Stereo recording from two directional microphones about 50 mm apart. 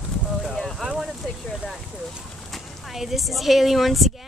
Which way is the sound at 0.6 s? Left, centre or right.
Centre.